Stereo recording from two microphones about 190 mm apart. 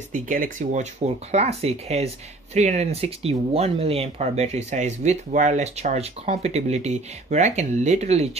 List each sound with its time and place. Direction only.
0.1 s speech: 45° right (ahead or behind)